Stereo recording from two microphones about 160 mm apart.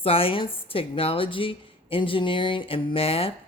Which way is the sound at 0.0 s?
35° left (ahead or behind).